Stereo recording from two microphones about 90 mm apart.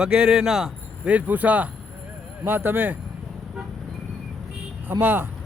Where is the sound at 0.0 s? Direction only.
10° right (ahead or behind).